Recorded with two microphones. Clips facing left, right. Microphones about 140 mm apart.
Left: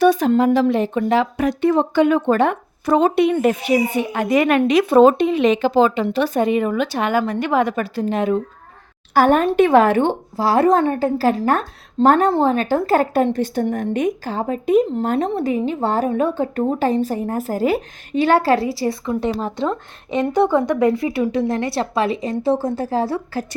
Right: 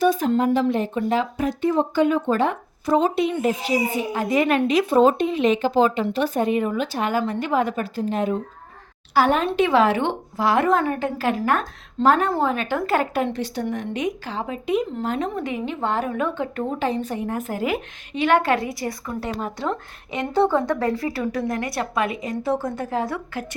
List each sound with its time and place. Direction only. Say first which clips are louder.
0.0 s speech: left 5 dB; 70° left (ahead or behind)
9.1 s a woman's voice: left 5 dB; 50° left (ahead or behind)